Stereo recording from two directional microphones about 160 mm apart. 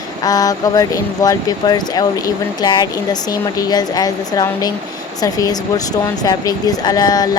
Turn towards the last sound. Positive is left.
turn(degrees=25)  # may be behind; listen again after turning